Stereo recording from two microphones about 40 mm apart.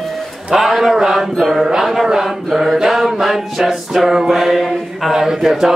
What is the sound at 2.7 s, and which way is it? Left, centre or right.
Music, centre.